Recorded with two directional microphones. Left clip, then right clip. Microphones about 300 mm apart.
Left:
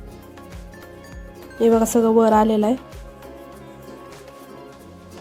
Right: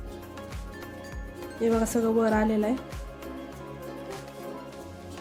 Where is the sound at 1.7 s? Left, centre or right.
Centre.